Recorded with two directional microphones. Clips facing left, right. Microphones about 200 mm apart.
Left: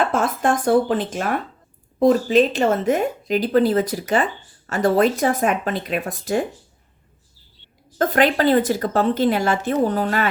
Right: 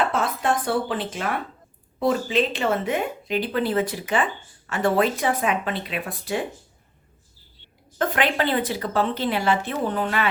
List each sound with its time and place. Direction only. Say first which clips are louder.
0.1 s speech: left 4 dB; 45° left (ahead or behind)
7.9 s speech: left 5 dB; 40° left (ahead or behind)